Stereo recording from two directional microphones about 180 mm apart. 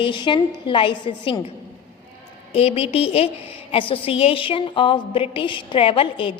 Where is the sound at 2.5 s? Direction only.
35° left (ahead or behind).